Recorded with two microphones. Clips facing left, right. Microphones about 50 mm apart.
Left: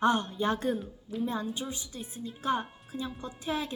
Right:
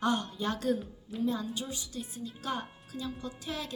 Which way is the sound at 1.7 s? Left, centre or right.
Left.